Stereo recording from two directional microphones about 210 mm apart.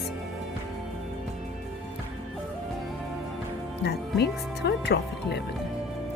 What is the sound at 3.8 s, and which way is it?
Speech, 50° left (ahead or behind).